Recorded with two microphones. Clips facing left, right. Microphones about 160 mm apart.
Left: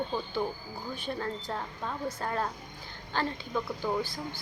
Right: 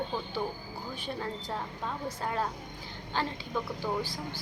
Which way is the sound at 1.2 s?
15° right (ahead or behind).